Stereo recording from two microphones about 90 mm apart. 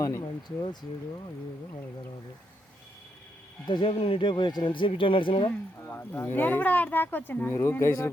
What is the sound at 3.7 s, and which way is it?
Speech, 75° left (ahead or behind).